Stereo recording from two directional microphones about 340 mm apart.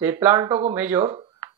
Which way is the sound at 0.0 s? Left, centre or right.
Centre.